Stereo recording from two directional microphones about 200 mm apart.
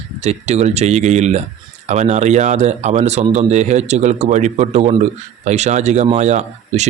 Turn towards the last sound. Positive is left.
turn(degrees=-35)  # may be behind; listen again after turning